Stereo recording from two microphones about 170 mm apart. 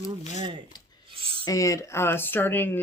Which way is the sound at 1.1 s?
30° right (ahead or behind).